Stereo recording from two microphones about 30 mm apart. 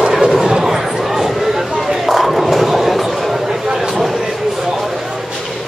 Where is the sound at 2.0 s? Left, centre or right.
Centre.